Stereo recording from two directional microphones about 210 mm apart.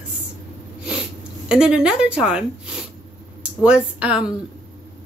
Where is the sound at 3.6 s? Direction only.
5° right (ahead or behind).